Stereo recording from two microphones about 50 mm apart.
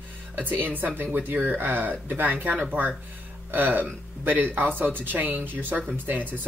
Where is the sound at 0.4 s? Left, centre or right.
Right.